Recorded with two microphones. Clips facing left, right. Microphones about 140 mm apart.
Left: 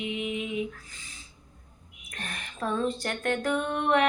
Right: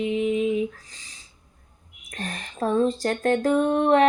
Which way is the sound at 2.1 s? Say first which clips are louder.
Right 6 dB; 40° right (ahead or behind).